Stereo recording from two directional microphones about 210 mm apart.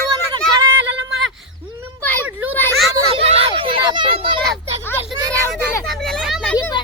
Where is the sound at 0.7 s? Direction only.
60° right (ahead or behind).